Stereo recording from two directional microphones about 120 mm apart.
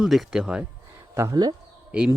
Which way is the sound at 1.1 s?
25° right (ahead or behind).